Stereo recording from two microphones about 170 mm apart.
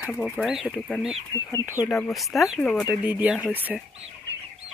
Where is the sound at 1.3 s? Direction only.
15° left (ahead or behind).